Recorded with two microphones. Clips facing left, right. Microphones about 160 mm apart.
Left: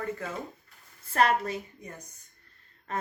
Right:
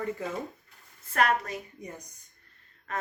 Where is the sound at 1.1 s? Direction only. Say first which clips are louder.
Left 1 dB; 30° left (ahead or behind).